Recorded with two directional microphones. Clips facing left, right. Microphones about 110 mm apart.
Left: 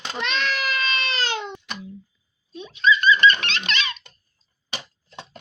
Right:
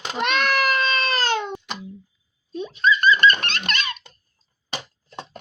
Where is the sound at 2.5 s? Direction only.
45° right (ahead or behind).